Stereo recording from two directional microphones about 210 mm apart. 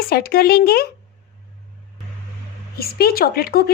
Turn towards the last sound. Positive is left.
turn(degrees=45)  # may be behind; listen again after turning